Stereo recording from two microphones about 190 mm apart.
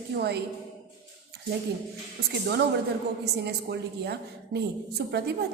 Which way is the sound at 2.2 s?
55° right (ahead or behind).